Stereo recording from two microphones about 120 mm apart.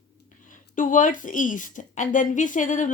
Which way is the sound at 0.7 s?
90° left.